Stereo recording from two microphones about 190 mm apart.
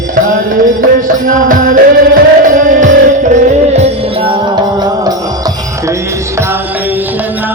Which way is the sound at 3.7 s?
25° right (ahead or behind).